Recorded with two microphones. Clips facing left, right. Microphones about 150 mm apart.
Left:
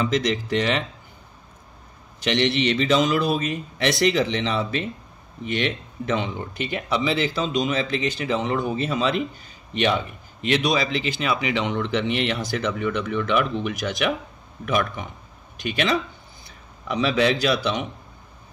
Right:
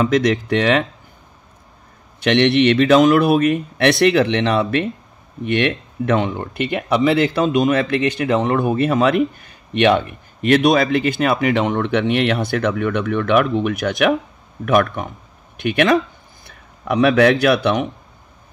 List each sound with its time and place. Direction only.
0.0 s speech: 55° right (ahead or behind)
2.1 s a man's voice: 60° right (ahead or behind)